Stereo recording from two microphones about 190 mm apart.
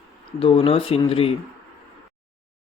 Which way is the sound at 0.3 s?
30° left (ahead or behind).